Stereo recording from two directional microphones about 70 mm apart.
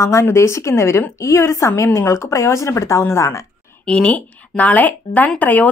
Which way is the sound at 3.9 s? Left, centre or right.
Centre.